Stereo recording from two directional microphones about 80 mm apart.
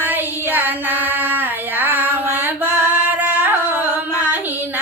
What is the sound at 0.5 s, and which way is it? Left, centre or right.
Female singing, right.